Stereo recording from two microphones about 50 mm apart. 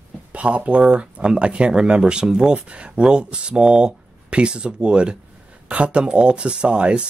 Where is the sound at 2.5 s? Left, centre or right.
Right.